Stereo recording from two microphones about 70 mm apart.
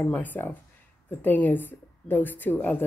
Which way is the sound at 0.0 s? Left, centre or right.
Left.